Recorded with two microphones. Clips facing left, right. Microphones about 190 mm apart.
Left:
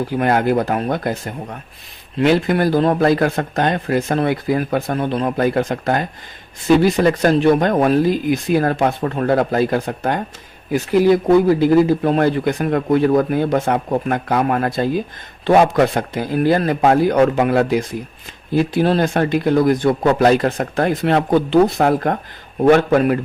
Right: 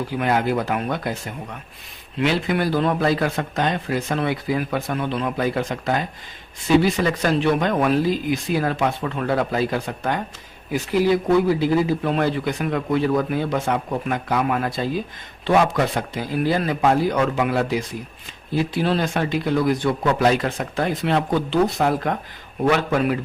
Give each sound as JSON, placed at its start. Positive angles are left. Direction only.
{"t": 0.1, "sound": "speech", "side_deg": 50}
{"t": 2.2, "sound": "speech", "side_deg": 50}